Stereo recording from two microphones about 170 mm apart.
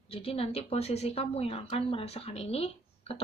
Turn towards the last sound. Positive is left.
turn(degrees=35)  # may be behind; listen again after turning